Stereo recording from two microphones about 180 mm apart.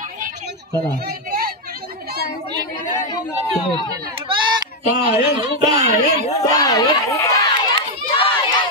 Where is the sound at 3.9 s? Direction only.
25° right (ahead or behind).